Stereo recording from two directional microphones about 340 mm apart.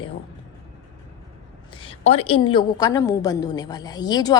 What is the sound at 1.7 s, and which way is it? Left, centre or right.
A woman's voice, centre.